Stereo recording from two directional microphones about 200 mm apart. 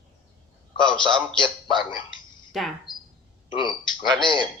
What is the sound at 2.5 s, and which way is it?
Speech, centre (ahead or behind).